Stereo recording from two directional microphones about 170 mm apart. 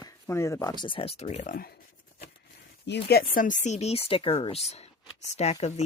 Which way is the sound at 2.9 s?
70° left (ahead or behind).